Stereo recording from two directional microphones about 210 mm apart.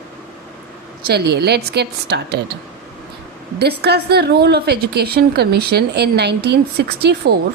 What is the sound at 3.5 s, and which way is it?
A woman's voice, 50° right (ahead or behind).